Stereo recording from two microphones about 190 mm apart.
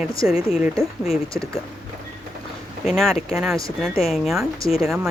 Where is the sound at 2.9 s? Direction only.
Centre (ahead or behind).